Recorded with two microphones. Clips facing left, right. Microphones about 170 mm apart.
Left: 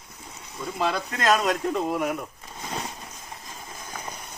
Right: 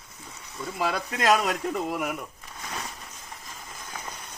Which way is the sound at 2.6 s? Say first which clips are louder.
Left 4 dB; 25° left (ahead or behind).